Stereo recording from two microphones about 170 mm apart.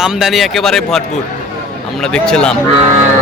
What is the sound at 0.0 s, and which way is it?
Speech, centre (ahead or behind).